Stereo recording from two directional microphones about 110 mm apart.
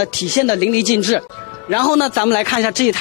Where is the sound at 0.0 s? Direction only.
10° left (ahead or behind).